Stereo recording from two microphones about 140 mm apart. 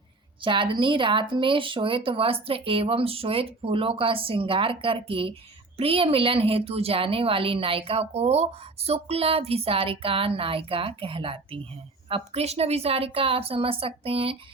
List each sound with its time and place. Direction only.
0.4 s speech: 35° right (ahead or behind)